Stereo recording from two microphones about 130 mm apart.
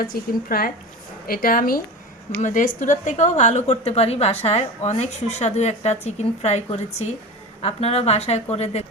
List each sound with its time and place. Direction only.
0.5 s speech: 90° left
2.4 s a woman's voice: 75° left (ahead or behind); by 8.8 s 55° left (ahead or behind)